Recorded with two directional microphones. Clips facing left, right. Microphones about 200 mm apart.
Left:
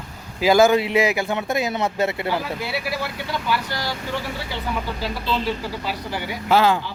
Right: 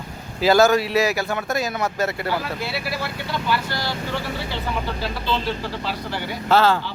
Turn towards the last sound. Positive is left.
turn(degrees=15)  # may be behind; listen again after turning